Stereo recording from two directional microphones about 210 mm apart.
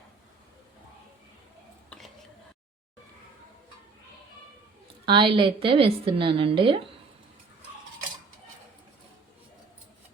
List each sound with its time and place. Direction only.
5.0 s a woman's voice: 25° right (ahead or behind)